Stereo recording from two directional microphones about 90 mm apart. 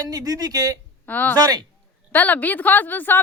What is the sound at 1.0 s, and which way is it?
Speech, 20° left (ahead or behind).